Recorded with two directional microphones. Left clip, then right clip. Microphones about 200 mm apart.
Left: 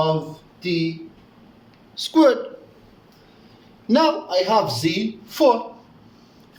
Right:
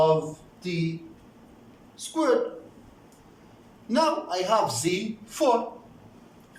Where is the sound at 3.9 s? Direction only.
40° left (ahead or behind).